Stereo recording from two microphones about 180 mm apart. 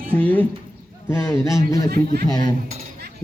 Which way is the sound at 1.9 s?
55° right (ahead or behind).